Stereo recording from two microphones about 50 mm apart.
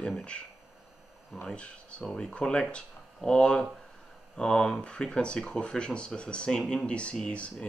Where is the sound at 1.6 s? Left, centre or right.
Left.